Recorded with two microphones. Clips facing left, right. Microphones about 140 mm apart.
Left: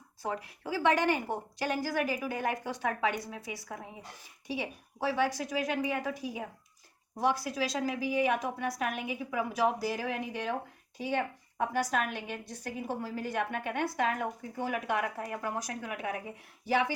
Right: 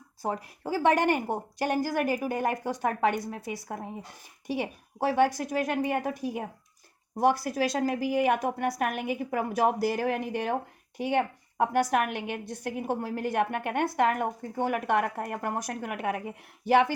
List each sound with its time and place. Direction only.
0.2 s a woman's voice: 40° right (ahead or behind); by 16.2 s 60° right (ahead or behind)